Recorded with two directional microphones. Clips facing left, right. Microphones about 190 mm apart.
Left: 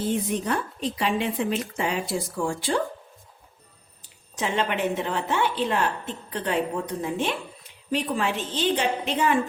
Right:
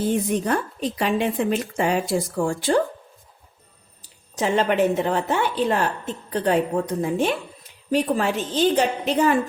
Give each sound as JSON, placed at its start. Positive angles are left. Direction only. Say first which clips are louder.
{"t": 0.4, "sound": "a woman's voice", "louder": "right 3 dB", "side_deg": -45}
{"t": 4.4, "sound": "a woman's voice", "louder": "right 6 dB", "side_deg": -40}